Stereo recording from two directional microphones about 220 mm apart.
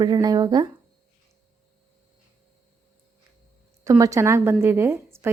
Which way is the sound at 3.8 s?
15° right (ahead or behind).